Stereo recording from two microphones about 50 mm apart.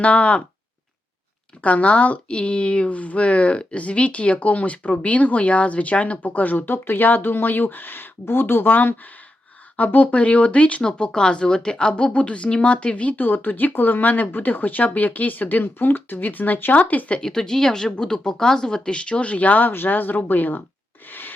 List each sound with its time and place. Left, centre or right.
0.0 s speech: left
1.6 s speech: left
6.7 s speech: left
17.2 s speech: centre; by 20.6 s left
21.1 s rub: left